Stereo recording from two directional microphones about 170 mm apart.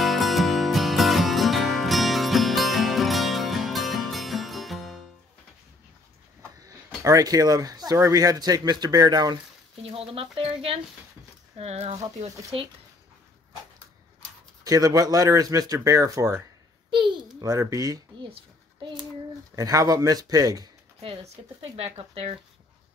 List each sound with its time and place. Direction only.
0.0 s music: centre (ahead or behind)
7.0 s speech: 20° right (ahead or behind)
9.8 s speech: 35° right (ahead or behind)
14.6 s speech: 20° right (ahead or behind)
16.9 s speech: 30° right (ahead or behind)
19.5 s speech: 20° right (ahead or behind)
21.0 s speech: 35° right (ahead or behind)